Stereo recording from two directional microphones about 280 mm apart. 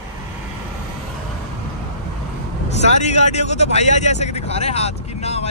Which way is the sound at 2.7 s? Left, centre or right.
Left.